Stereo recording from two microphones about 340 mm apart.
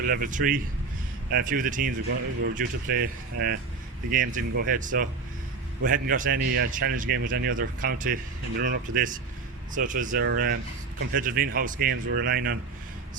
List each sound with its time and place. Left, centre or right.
0.0 s speech: right